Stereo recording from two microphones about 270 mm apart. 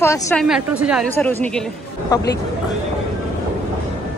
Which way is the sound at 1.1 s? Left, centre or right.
Centre.